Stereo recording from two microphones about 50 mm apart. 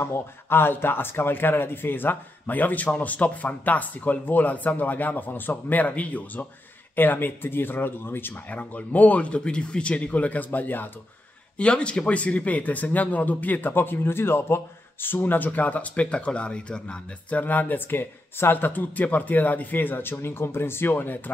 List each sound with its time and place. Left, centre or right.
0.0 s speech: left
7.0 s speech: left
8.5 s speech: left
11.5 s speech: left